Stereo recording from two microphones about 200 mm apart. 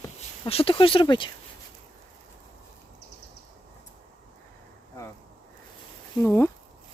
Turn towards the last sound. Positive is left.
turn(degrees=10)  # may be behind; listen again after turning